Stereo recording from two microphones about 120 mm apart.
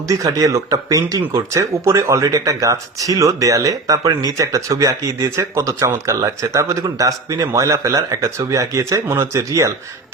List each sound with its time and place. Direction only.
0.1 s speech: 25° right (ahead or behind)